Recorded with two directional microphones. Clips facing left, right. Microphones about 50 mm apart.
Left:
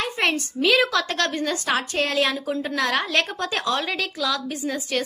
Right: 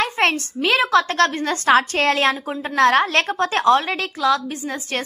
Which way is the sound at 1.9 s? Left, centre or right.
Right.